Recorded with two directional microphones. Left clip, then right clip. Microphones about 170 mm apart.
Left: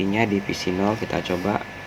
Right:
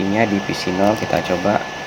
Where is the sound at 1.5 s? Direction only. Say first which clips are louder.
Right 8 dB; 30° left (ahead or behind).